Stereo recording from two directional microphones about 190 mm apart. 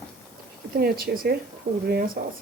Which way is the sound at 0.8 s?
50° right (ahead or behind).